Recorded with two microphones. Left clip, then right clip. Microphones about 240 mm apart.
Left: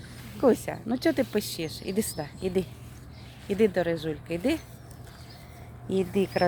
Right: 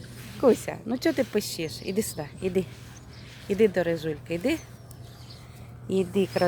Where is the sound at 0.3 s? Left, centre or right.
Centre.